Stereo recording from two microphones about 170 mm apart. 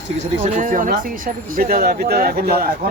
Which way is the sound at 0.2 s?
45° right (ahead or behind).